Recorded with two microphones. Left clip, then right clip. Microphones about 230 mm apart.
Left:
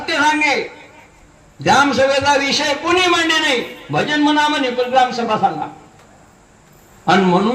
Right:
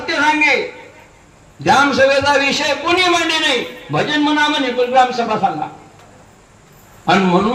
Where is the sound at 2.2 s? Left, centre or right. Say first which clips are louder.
Right 1 dB; left.